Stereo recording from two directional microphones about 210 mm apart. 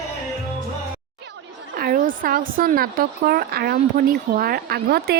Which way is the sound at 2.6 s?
45° right (ahead or behind).